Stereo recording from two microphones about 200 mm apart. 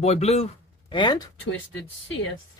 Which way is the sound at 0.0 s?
30° left (ahead or behind).